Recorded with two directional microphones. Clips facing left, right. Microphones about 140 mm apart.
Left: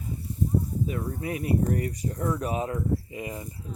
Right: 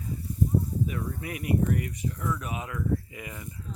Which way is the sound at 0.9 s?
30° left (ahead or behind).